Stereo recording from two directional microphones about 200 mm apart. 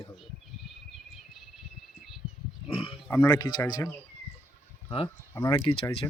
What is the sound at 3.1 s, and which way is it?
Speech, 10° left (ahead or behind).